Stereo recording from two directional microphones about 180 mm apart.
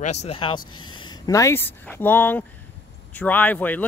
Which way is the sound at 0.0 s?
40° left (ahead or behind).